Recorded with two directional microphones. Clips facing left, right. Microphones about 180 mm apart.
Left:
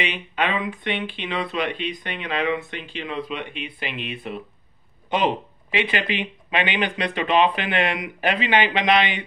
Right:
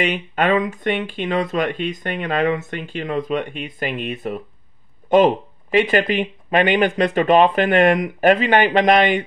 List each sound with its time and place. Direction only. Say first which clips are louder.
0.0 s speech: right 6 dB; 45° right (ahead or behind)